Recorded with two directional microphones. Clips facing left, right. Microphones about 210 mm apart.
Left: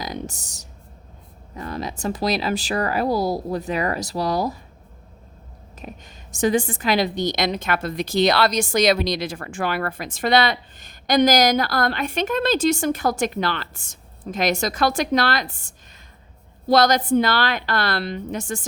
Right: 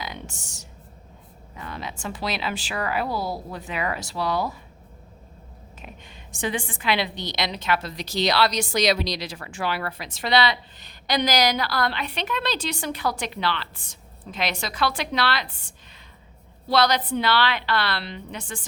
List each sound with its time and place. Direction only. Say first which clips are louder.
0.0 s music: left 6 dB; 40° left (ahead or behind)
1.5 s speech: left 6 dB; 40° left (ahead or behind)
5.8 s a woman's voice: left 6 dB; 40° left (ahead or behind)